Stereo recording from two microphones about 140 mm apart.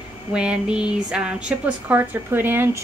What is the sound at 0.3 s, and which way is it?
Speech, 5° right (ahead or behind).